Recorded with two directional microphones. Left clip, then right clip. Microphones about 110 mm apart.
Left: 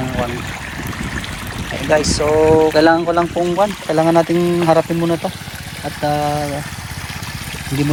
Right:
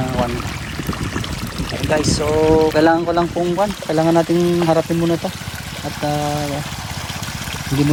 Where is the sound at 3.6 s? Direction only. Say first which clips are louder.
Left 3 dB; centre (ahead or behind).